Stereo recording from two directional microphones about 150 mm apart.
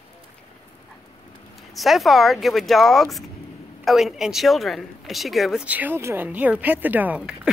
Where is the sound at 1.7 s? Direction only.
Centre (ahead or behind).